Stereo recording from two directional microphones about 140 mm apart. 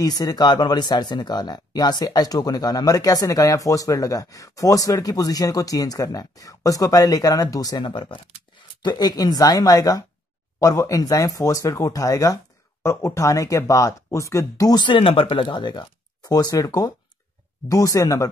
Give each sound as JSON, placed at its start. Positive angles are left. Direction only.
{"t": 0.0, "sound": "speech", "side_deg": 25}